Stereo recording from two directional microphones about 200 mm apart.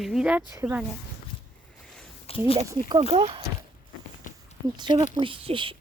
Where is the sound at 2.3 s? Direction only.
30° left (ahead or behind).